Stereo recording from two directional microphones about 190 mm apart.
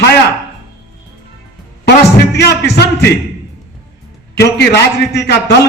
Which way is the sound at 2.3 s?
60° left (ahead or behind).